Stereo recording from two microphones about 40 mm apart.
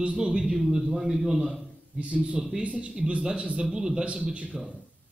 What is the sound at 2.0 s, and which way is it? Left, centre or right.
Speech, right.